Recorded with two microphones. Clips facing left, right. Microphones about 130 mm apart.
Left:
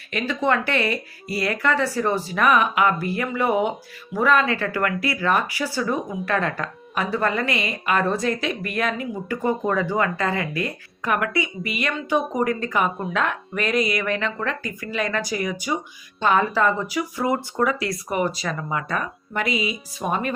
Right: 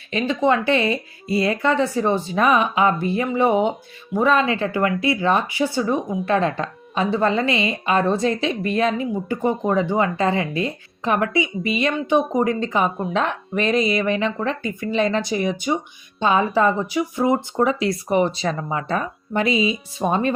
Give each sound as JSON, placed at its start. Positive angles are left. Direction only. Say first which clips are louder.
{"t": 0.1, "sound": "speech", "louder": "right 3 dB", "side_deg": -20}